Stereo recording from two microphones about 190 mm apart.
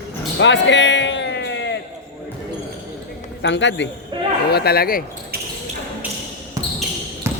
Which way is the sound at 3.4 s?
70° left (ahead or behind).